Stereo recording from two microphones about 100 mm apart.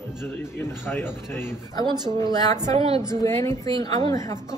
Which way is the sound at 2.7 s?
70° right (ahead or behind).